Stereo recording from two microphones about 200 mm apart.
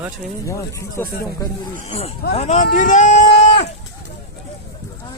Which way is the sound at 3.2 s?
60° left (ahead or behind).